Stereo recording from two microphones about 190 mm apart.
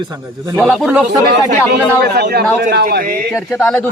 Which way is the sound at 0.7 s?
5° right (ahead or behind).